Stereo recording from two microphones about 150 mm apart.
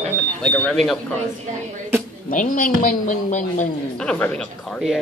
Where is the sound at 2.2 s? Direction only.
60° left (ahead or behind).